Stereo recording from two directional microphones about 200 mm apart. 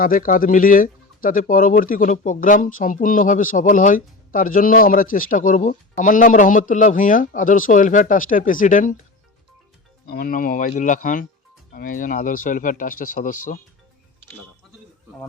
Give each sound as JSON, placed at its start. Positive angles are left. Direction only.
{"t": 0.0, "sound": "speech", "side_deg": 45}
{"t": 10.1, "sound": "speech", "side_deg": 45}